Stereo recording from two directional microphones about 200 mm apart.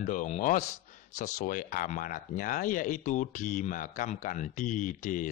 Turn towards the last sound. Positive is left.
turn(degrees=40)  # may be behind; listen again after turning